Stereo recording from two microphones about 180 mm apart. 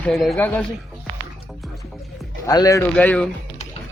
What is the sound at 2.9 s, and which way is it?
Speech, 5° left (ahead or behind).